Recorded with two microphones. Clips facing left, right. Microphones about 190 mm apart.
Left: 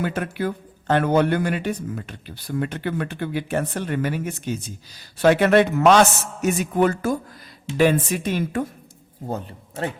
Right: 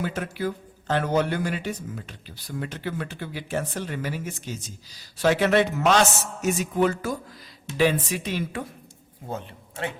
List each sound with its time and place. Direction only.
0.0 s speech: 60° left (ahead or behind)
9.2 s a man's voice: 40° left (ahead or behind)